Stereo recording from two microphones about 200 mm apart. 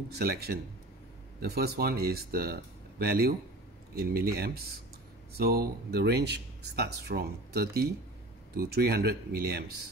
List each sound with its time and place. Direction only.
0.2 s speech: 50° right (ahead or behind)